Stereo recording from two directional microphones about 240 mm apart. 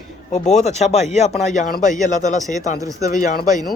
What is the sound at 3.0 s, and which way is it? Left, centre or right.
Speech, left.